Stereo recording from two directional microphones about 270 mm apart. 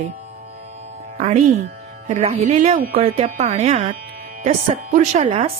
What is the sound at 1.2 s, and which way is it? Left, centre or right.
Speech, right.